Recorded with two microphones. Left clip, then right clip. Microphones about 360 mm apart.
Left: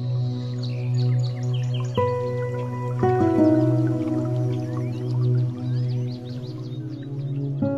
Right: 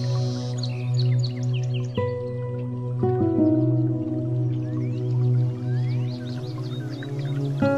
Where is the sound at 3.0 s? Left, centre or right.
Left.